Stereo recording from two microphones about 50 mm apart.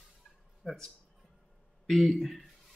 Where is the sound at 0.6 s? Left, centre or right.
Centre.